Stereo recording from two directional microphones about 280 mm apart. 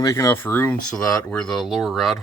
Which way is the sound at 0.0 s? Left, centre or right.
Centre.